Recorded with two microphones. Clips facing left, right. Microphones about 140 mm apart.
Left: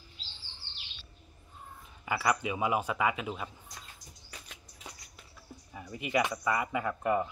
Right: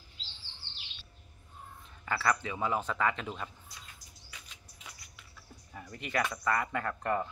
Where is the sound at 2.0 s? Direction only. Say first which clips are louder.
Left 1 dB; 10° left (ahead or behind).